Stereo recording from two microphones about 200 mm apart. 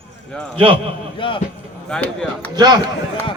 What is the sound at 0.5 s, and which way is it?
Speech, 25° right (ahead or behind).